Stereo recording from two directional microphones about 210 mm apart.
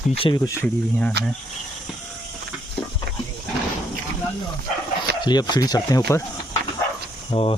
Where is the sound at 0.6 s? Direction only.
5° left (ahead or behind).